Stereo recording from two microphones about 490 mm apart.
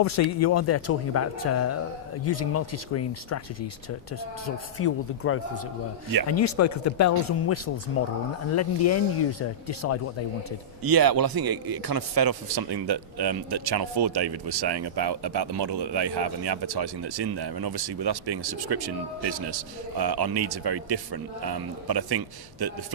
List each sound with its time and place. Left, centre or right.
0.0 s speech: left
4.4 s speech: left
10.8 s a man's voice: right
20.0 s a man's voice: right